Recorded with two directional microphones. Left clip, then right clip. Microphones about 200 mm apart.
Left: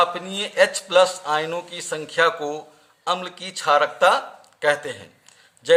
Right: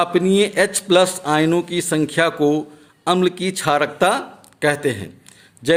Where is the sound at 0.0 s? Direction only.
35° right (ahead or behind).